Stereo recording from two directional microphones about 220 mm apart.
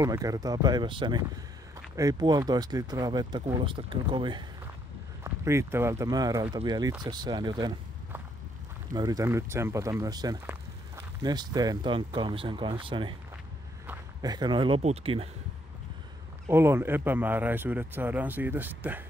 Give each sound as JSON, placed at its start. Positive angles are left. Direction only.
{"t": 0.0, "sound": "speech", "side_deg": -15}
{"t": 16.4, "sound": "speech", "side_deg": -10}